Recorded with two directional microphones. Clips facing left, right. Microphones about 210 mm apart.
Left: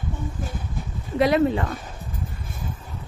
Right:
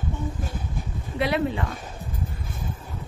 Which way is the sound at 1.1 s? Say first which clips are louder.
Left 6 dB; 40° left (ahead or behind).